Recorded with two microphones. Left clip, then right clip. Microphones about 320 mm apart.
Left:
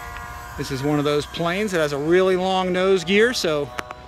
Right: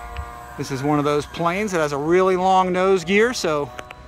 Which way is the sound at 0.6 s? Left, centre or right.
Centre.